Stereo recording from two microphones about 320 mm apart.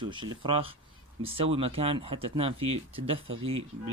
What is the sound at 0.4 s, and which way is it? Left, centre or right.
Speech, centre.